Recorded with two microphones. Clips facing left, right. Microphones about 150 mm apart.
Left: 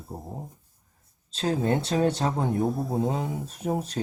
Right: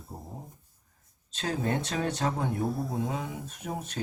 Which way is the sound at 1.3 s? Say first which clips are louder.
Left 5 dB; 30° left (ahead or behind).